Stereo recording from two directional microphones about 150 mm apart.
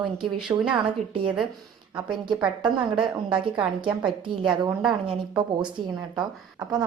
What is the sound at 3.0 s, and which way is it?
Speech, 35° right (ahead or behind).